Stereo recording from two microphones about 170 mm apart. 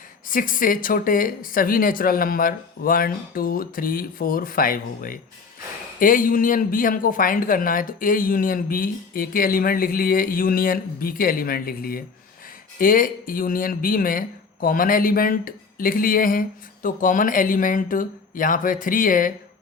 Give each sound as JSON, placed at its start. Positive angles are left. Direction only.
{"t": 0.3, "sound": "speech", "side_deg": 55}